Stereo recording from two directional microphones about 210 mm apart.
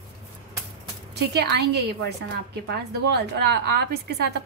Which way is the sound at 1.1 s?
50° right (ahead or behind).